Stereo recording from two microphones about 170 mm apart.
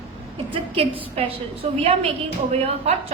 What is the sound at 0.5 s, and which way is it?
A woman's voice, 30° right (ahead or behind).